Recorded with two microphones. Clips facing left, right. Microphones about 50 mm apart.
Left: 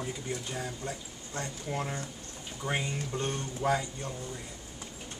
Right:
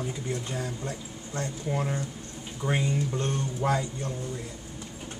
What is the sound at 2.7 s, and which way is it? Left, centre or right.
A man's voice, centre.